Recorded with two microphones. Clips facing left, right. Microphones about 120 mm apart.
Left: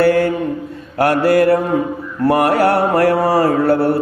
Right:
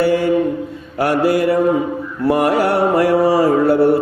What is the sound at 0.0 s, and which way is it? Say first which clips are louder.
Mantra: left 1 dB; 55° left (ahead or behind).